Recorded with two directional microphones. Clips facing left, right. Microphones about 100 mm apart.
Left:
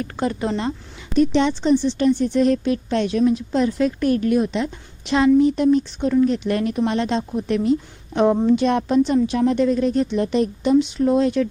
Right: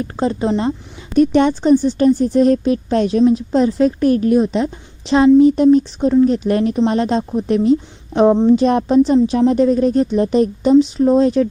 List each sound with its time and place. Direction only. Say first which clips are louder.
0.0 s speech: right 5 dB; 30° right (ahead or behind)
1.1 s speech: right 5 dB; 50° right (ahead or behind)